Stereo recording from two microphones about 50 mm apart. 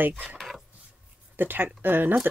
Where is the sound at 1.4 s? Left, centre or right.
Right.